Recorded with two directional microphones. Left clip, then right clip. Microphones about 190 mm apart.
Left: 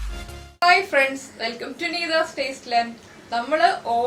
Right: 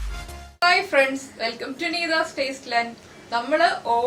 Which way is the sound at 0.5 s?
5° right (ahead or behind).